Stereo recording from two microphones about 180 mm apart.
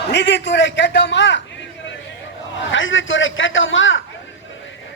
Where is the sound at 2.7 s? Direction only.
90° left.